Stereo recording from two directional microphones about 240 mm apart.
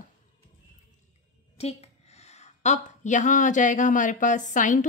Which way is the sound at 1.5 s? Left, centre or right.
Left.